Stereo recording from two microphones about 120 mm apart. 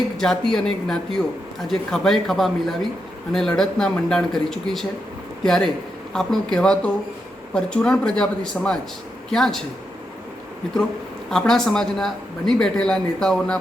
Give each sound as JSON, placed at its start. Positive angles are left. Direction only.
{"t": 0.2, "sound": "a man's voice", "side_deg": 5}
{"t": 11.3, "sound": "speech", "side_deg": 5}